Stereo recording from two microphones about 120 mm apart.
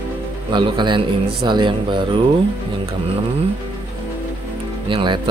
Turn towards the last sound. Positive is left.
turn(degrees=-40)  # may be behind; listen again after turning